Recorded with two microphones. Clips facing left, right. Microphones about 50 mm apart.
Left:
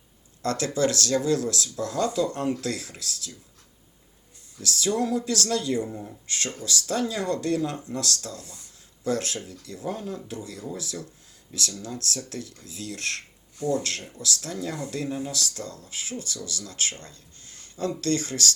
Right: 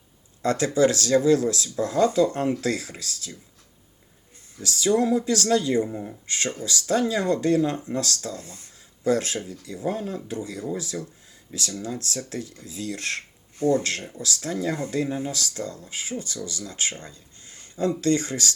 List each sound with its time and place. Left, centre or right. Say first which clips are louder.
0.4 s speech: right 4 dB; right
4.5 s speech: right 4 dB; right
6.2 s speech: right 2 dB; right